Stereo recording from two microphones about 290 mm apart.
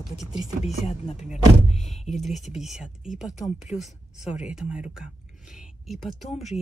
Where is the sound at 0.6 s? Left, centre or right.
Left.